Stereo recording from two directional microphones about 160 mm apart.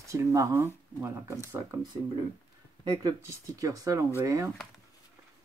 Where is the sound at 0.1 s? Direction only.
20° right (ahead or behind).